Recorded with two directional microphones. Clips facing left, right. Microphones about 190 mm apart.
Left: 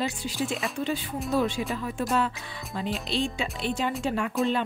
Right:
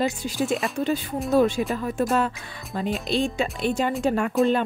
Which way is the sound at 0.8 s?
45° right (ahead or behind).